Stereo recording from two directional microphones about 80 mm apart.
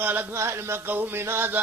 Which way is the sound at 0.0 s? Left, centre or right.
Right.